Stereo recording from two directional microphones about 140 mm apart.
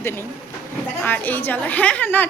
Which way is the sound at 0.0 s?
15° left (ahead or behind).